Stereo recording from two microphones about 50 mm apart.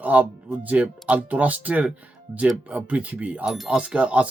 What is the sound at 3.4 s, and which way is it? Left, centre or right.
Speech, centre.